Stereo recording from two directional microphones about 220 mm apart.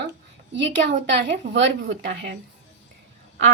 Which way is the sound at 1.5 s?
55° right (ahead or behind).